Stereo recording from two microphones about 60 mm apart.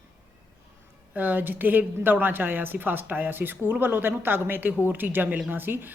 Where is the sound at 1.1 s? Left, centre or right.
Right.